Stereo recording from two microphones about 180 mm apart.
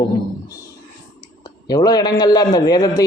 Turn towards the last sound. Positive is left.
turn(degrees=20)  # may be behind; listen again after turning